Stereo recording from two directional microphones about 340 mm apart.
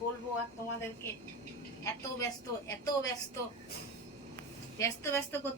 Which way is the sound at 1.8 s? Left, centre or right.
Centre.